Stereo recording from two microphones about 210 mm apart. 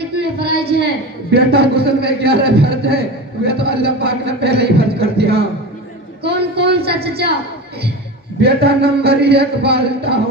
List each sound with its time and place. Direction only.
0.2 s a sound: 50° right (ahead or behind)
1.3 s a man's voice: 50° right (ahead or behind)
8.4 s a man's voice: 50° right (ahead or behind)